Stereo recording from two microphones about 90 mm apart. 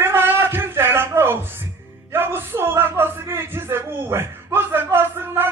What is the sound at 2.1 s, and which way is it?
Speech, 25° right (ahead or behind).